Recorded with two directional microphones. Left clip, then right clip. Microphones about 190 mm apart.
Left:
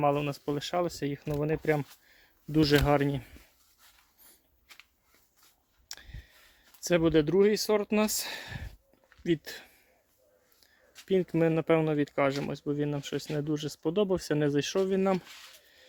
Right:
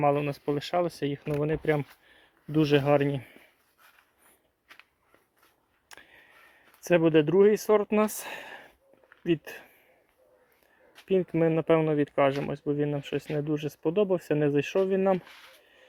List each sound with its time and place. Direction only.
0.0 s speech: 20° left (ahead or behind)
5.9 s a sound: 20° left (ahead or behind)
6.8 s speech: 20° left (ahead or behind)
7.3 s speech: 10° left (ahead or behind)
8.2 s speech: 25° left (ahead or behind)
11.0 s speech: 30° left (ahead or behind)
13.1 s speech: 15° left (ahead or behind)
13.4 s speech: 35° left (ahead or behind)